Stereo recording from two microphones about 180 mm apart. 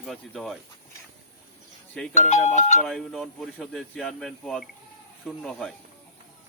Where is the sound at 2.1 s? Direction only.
40° left (ahead or behind).